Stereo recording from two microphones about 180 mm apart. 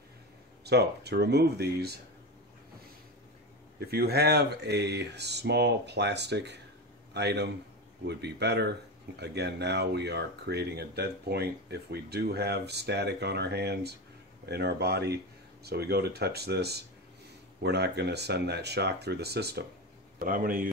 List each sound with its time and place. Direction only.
0.7 s speech: 65° right (ahead or behind)
3.8 s speech: 60° right (ahead or behind)
20.2 s speech: 50° right (ahead or behind)